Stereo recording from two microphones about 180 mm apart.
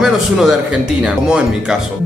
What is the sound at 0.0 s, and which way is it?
A man's voice, centre (ahead or behind).